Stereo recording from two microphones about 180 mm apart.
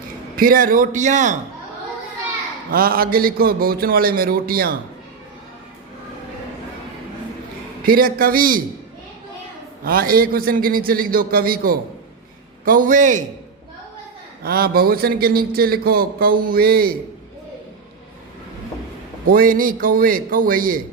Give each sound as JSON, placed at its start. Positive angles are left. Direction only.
{"t": 0.3, "sound": "a man's voice", "side_deg": -50}
{"t": 2.7, "sound": "speech", "side_deg": -55}
{"t": 7.9, "sound": "a man's voice", "side_deg": -55}
{"t": 9.8, "sound": "a man's voice", "side_deg": -55}
{"t": 14.4, "sound": "speech", "side_deg": -55}
{"t": 19.3, "sound": "a man's voice", "side_deg": -50}